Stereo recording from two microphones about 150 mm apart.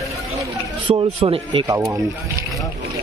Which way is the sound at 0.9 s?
40° right (ahead or behind).